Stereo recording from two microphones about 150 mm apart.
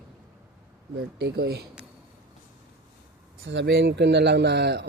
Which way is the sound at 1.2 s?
90° right.